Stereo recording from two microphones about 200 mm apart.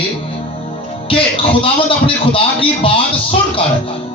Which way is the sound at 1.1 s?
25° left (ahead or behind).